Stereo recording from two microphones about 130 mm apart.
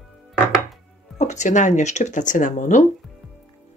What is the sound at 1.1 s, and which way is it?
Speech, 65° left (ahead or behind).